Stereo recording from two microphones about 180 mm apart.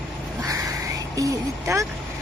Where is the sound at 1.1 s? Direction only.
20° right (ahead or behind).